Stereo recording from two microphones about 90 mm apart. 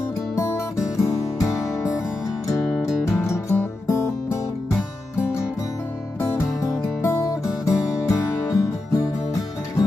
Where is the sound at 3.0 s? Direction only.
35° left (ahead or behind).